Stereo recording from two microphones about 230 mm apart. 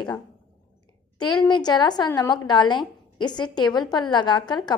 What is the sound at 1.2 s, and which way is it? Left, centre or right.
A woman's voice, centre.